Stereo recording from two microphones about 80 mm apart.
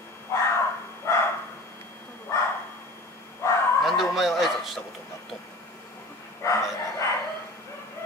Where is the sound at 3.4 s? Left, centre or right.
Left.